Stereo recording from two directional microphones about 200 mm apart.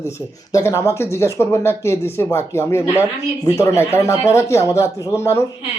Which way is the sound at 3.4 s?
15° left (ahead or behind).